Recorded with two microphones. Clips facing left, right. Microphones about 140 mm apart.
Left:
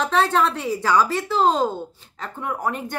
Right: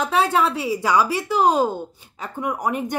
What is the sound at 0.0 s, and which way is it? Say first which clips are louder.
A woman's voice: even; 5° right (ahead or behind).